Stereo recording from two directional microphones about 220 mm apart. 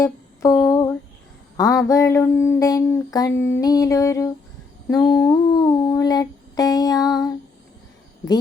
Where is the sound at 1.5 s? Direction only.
15° left (ahead or behind).